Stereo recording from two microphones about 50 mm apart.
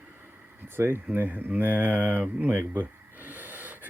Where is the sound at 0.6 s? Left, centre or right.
Right.